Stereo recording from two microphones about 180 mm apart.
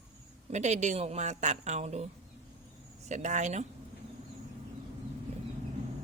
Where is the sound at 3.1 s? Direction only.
40° right (ahead or behind).